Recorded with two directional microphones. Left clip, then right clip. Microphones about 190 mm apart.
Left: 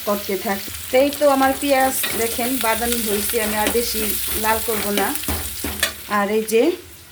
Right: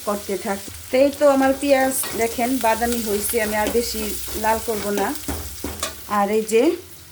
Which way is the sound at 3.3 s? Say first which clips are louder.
Even; 5° right (ahead or behind).